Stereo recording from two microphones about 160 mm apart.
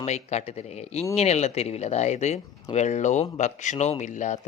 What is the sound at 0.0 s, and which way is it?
Speech, 45° left (ahead or behind).